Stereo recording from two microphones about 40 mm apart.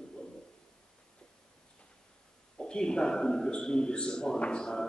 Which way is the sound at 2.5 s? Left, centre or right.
Left.